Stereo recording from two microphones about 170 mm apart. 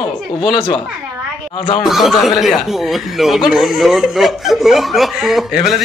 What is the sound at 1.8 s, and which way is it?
Speech, centre (ahead or behind).